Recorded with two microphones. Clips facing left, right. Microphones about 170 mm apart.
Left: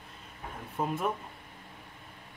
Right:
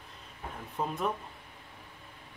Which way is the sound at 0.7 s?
5° left (ahead or behind).